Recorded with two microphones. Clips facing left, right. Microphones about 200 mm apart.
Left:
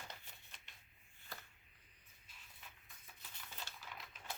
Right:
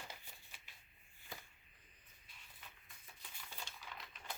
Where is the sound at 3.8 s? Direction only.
Centre (ahead or behind).